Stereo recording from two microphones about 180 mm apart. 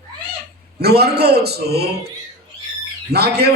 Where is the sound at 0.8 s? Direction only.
60° right (ahead or behind).